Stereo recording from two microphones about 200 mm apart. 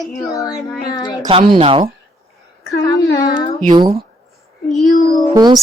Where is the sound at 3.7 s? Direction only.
20° right (ahead or behind).